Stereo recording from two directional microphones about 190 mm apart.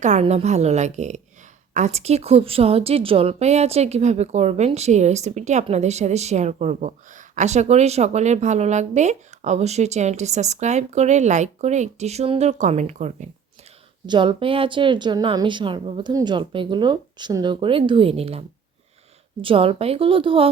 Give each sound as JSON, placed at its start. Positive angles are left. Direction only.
{"t": 0.0, "sound": "speech", "side_deg": -35}
{"t": 14.1, "sound": "a woman's voice", "side_deg": -25}